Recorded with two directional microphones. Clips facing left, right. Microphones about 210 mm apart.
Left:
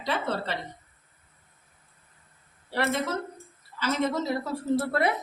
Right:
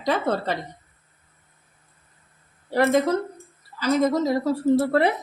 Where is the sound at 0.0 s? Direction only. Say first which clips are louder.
Right 6 dB; 45° right (ahead or behind).